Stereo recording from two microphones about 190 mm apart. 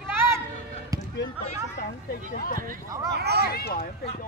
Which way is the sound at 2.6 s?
45° right (ahead or behind).